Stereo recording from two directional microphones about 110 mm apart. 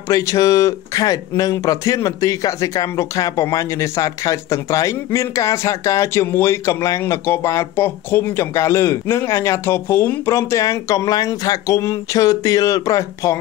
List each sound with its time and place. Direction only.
0.1 s speech: 30° left (ahead or behind)